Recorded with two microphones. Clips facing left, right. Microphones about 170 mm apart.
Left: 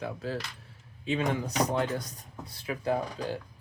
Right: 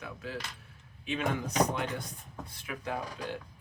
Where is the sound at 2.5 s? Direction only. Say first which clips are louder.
Left 7 dB; 30° left (ahead or behind).